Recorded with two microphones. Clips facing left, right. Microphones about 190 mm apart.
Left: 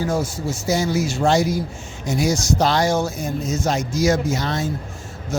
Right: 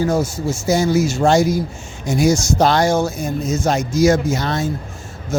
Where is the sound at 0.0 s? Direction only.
45° right (ahead or behind).